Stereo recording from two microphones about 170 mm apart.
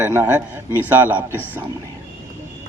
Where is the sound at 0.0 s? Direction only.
15° right (ahead or behind).